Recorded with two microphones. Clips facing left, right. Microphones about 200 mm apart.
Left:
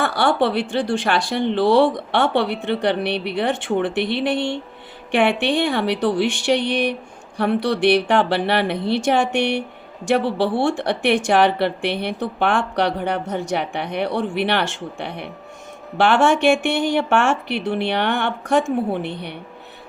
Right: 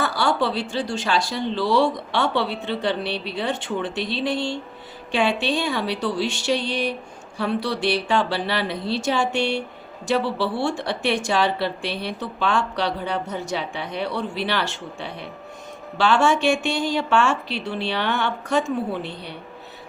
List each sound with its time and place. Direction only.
0.0 s speech: 60° left (ahead or behind)
9.4 s speech: 15° left (ahead or behind)
10.1 s speech: 55° left (ahead or behind)